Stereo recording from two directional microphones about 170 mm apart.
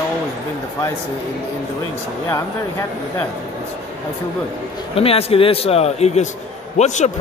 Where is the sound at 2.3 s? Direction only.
15° left (ahead or behind).